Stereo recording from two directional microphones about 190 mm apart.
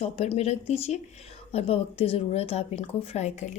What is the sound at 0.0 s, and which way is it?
Speech, 35° left (ahead or behind).